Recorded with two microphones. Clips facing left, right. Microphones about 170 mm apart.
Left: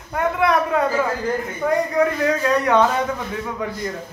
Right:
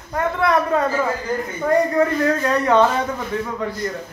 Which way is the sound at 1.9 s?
Centre (ahead or behind).